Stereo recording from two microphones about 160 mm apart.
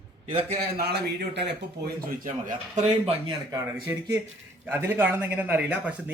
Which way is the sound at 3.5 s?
20° right (ahead or behind).